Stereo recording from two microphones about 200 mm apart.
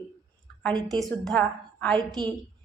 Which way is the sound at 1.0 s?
5° left (ahead or behind).